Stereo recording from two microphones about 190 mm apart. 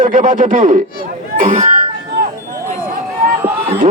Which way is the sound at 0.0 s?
40° right (ahead or behind).